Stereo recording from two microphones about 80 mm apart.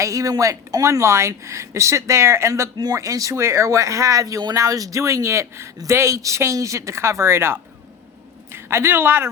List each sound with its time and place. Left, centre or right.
0.0 s speech: right
2.7 s speech: right